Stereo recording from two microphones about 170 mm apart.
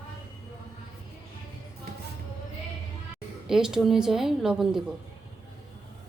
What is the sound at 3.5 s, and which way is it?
A woman's voice, 5° right (ahead or behind).